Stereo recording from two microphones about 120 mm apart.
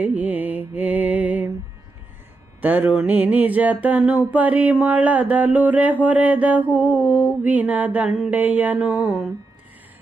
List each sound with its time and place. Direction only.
0.0 s music: 10° right (ahead or behind)
2.6 s mantra: 15° right (ahead or behind)